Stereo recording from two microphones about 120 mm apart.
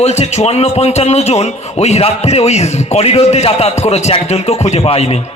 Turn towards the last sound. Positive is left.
turn(degrees=55)  # may be behind; listen again after turning